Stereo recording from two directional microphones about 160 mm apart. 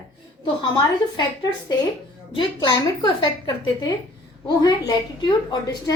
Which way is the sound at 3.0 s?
25° left (ahead or behind).